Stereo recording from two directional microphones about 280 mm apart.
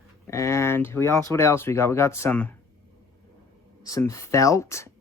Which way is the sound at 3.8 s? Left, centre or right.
Centre.